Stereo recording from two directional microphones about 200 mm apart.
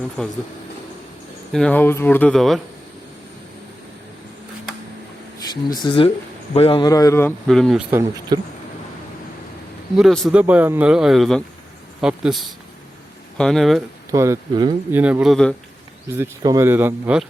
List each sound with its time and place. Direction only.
0.2 s speech: 5° left (ahead or behind)
1.5 s a man's voice: 5° left (ahead or behind)
5.7 s a man's voice: 25° left (ahead or behind); by 8.4 s 15° right (ahead or behind)
9.9 s speech: centre (ahead or behind)
10.4 s speech: 10° right (ahead or behind)
14.1 s speech: 15° right (ahead or behind)
14.9 s speech: 10° right (ahead or behind)
16.1 s speech: 15° right (ahead or behind)